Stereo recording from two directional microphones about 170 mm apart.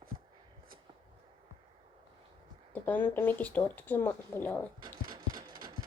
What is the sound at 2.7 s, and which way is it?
Speech, 10° left (ahead or behind).